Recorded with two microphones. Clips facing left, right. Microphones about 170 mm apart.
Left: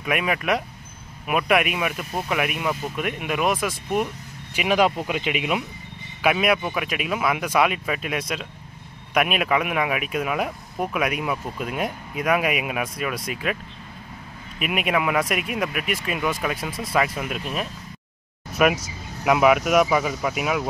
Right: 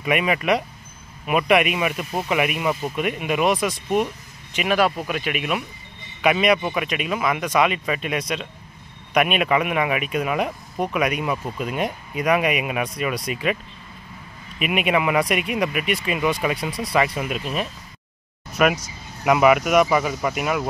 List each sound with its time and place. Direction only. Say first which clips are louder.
0.0 s speech: right 3 dB; centre (ahead or behind)
4.6 s speech: even; 15° left (ahead or behind)
6.2 s speech: right 2 dB; 5° left (ahead or behind)
14.6 s speech: right 2 dB; centre (ahead or behind)